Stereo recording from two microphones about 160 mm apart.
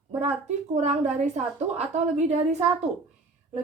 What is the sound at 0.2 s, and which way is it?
Speech, 45° right (ahead or behind).